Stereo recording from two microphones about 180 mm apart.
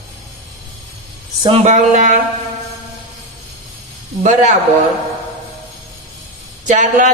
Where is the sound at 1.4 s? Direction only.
35° right (ahead or behind).